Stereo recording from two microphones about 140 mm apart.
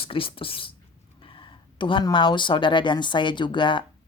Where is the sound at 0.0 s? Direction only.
40° left (ahead or behind).